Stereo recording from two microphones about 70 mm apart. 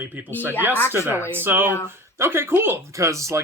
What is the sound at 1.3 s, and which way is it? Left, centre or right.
Speech, right.